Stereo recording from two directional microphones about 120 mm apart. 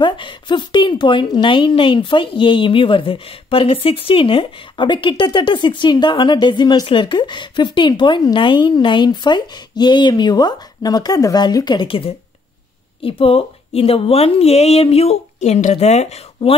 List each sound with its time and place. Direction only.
0.0 s a woman's voice: 40° left (ahead or behind); by 16.5 s 65° left (ahead or behind)